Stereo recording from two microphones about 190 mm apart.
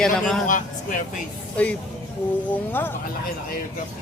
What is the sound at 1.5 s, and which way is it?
Speech, 5° left (ahead or behind).